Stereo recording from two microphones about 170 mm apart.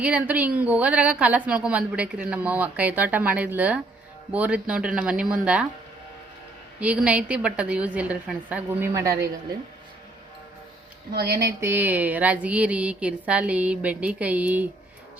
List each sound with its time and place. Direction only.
0.0 s a woman's voice: 10° right (ahead or behind)
6.7 s a woman's voice: 5° right (ahead or behind)
11.1 s speech: 70° right (ahead or behind)
11.6 s a woman's voice: 10° right (ahead or behind)